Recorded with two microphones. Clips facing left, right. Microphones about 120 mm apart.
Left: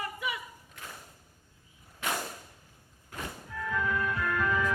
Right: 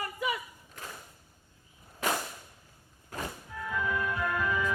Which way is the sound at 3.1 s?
35° right (ahead or behind).